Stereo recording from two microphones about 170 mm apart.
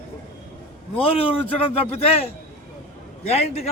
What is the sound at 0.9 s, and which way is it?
Speech, 35° left (ahead or behind).